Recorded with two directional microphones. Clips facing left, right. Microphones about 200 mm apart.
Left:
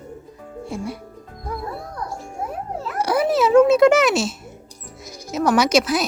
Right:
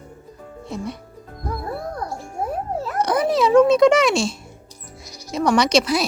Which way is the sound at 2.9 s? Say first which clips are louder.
Left 1 dB; 5° left (ahead or behind).